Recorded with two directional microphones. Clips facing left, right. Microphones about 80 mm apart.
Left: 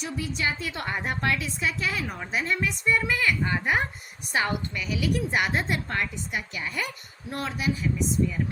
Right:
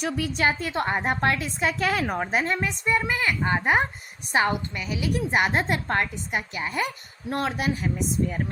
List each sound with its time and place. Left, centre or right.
0.0 s a woman's voice: right
0.7 s a woman's voice: right
7.3 s speech: right